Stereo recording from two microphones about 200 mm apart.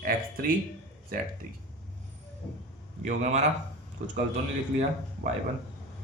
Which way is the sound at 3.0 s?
35° right (ahead or behind).